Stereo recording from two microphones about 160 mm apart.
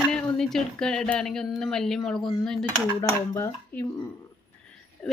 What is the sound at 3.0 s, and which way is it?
Speech, 20° left (ahead or behind).